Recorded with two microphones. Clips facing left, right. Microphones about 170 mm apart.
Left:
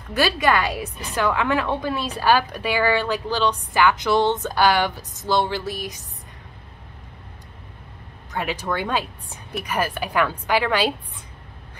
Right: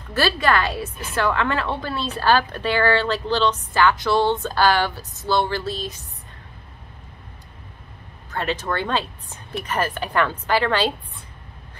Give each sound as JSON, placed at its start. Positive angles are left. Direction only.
{"t": 0.1, "sound": "a woman's voice", "side_deg": 15}
{"t": 8.3, "sound": "a woman's voice", "side_deg": 15}